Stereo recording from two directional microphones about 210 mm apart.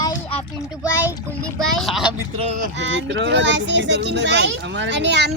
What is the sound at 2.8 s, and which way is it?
Speech, 60° right (ahead or behind).